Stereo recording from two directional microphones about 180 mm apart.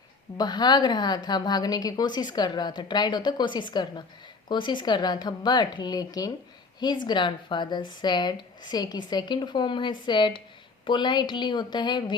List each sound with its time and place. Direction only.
0.3 s a woman's voice: 25° left (ahead or behind)